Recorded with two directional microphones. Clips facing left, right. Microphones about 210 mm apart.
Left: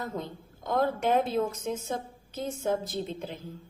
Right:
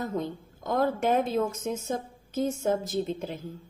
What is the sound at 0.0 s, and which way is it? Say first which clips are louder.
A woman's voice: right 4 dB; 45° right (ahead or behind).